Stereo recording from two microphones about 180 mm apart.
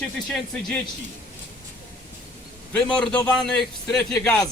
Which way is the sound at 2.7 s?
5° left (ahead or behind).